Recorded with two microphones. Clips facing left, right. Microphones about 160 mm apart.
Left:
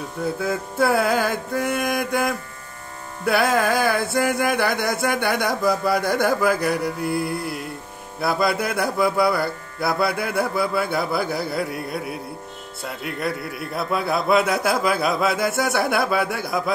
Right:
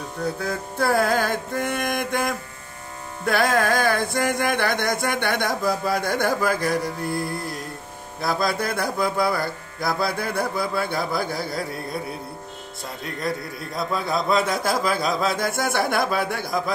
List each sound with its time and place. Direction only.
0.4 s music: 5° left (ahead or behind)
8.2 s music: 5° left (ahead or behind)
13.2 s a man's voice: 65° left (ahead or behind)
13.9 s music: 5° left (ahead or behind)